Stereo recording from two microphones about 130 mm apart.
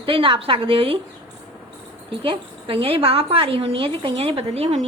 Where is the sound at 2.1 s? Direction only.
45° right (ahead or behind).